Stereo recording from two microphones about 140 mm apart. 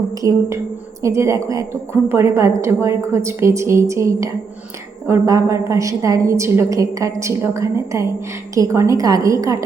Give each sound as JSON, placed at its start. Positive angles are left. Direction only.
{"t": 0.1, "sound": "a woman's voice", "side_deg": -25}